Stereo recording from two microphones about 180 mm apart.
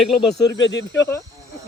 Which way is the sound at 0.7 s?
75° left (ahead or behind).